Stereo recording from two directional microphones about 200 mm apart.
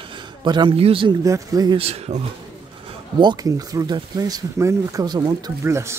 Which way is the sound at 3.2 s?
20° right (ahead or behind).